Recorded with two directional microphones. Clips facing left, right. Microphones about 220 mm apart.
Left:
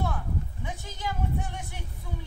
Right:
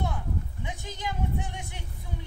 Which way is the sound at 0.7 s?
15° right (ahead or behind).